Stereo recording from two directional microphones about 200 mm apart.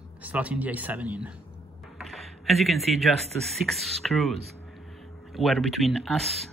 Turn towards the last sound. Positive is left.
turn(degrees=0)  # may be behind; listen again after turning